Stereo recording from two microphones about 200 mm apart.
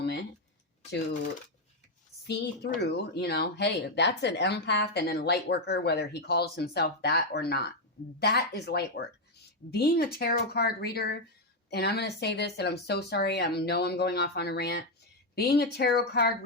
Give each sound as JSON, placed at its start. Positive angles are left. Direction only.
{"t": 2.2, "sound": "a woman's voice", "side_deg": 55}